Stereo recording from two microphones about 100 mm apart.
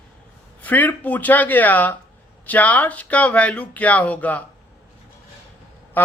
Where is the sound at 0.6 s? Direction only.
15° left (ahead or behind).